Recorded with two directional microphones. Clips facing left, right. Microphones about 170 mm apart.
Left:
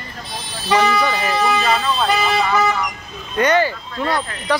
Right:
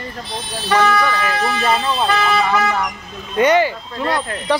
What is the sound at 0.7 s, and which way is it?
Speech, 10° left (ahead or behind).